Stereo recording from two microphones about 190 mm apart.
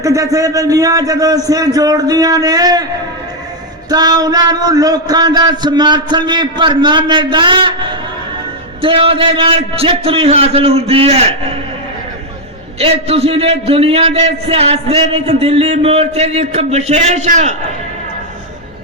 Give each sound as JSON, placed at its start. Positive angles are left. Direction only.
{"t": 0.0, "sound": "a man's voice", "side_deg": -15}
{"t": 3.8, "sound": "a man's voice", "side_deg": -20}
{"t": 8.8, "sound": "a man's voice", "side_deg": -30}
{"t": 12.8, "sound": "a man's voice", "side_deg": -30}